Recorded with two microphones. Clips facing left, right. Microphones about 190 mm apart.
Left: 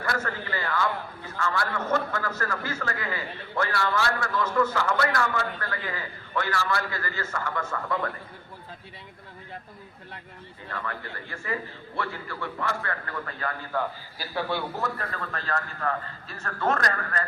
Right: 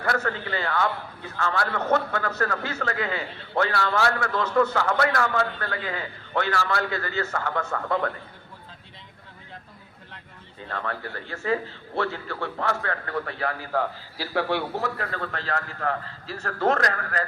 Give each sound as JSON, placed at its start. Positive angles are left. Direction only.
{"t": 0.0, "sound": "a man's voice", "side_deg": -70}
{"t": 1.4, "sound": "a man's voice", "side_deg": -80}
{"t": 10.7, "sound": "a man's voice", "side_deg": -75}